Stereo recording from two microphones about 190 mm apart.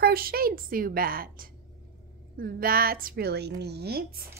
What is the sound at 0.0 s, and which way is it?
A woman's voice, 50° right (ahead or behind).